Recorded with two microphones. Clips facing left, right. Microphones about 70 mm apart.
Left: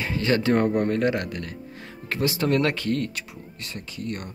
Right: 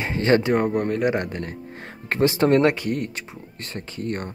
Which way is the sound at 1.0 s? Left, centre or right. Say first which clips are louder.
Right 2 dB; right.